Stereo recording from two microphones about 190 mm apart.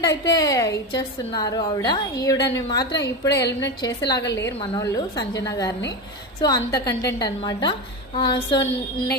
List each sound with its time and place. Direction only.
0.0 s a woman's voice: 20° left (ahead or behind)